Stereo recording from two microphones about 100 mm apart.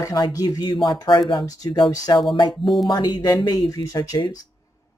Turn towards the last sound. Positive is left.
turn(degrees=45)  # may be behind; listen again after turning